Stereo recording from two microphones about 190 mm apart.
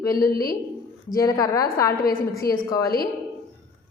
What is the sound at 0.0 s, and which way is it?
A woman's voice, 15° left (ahead or behind).